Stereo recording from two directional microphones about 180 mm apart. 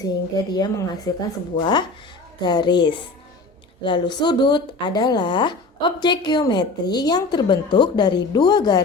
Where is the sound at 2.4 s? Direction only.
25° left (ahead or behind).